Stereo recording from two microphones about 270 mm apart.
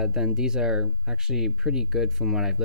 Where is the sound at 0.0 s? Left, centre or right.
Centre.